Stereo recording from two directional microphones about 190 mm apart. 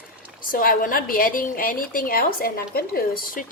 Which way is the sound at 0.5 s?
50° left (ahead or behind).